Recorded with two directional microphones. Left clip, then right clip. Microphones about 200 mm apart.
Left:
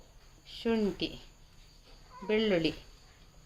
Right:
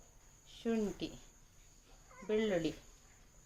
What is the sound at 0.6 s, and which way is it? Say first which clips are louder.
Speech: left 6 dB; 20° left (ahead or behind).